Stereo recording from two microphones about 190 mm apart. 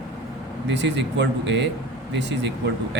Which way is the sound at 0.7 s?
65° right (ahead or behind).